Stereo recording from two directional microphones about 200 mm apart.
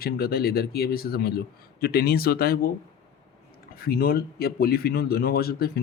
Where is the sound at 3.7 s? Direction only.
50° left (ahead or behind).